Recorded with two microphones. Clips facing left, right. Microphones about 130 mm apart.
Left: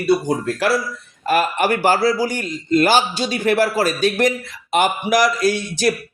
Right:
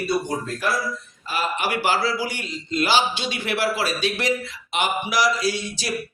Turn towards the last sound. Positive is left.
turn(degrees=55)  # may be behind; listen again after turning